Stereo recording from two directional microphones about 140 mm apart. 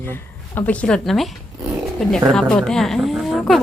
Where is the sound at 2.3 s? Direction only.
5° left (ahead or behind).